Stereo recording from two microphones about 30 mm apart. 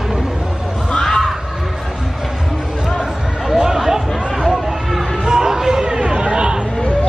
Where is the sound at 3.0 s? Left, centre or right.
Right.